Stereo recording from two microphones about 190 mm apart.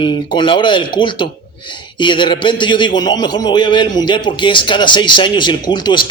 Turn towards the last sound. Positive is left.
turn(degrees=25)  # may be behind; listen again after turning